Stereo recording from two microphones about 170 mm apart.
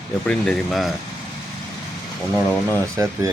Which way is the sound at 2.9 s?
20° right (ahead or behind).